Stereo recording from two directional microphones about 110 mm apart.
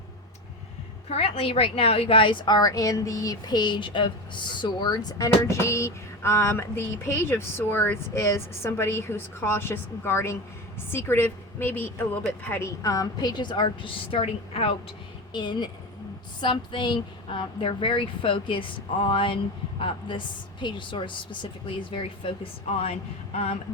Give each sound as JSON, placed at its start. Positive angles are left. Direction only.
{"t": 1.1, "sound": "a woman's voice", "side_deg": 65}
{"t": 15.3, "sound": "a woman's voice", "side_deg": 40}